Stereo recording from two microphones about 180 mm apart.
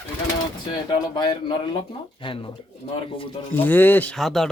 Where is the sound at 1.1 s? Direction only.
25° left (ahead or behind).